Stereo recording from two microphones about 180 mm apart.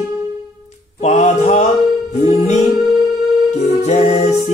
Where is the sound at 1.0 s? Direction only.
40° left (ahead or behind).